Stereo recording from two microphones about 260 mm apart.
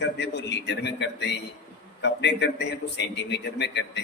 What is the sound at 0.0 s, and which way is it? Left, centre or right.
A man's voice, left.